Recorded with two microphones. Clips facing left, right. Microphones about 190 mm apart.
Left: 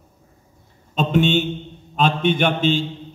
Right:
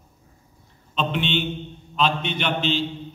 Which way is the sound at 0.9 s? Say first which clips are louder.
Left 7 dB; 45° left (ahead or behind).